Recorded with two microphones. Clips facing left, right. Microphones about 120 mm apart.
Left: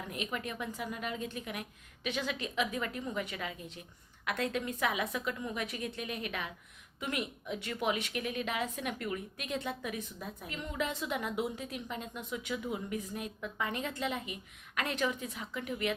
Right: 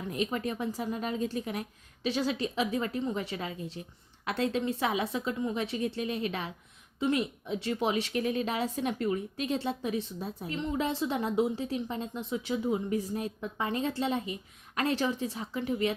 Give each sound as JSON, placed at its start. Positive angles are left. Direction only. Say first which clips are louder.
{"t": 0.1, "sound": "a woman's voice", "louder": "right 8 dB", "side_deg": -35}